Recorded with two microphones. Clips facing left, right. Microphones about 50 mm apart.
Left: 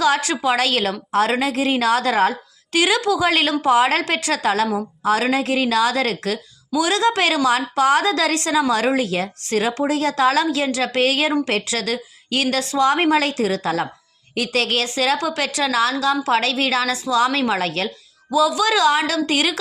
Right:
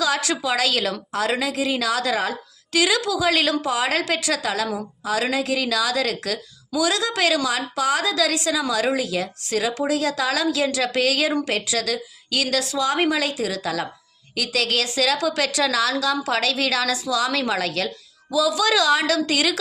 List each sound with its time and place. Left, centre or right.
0.0 s a woman's voice: left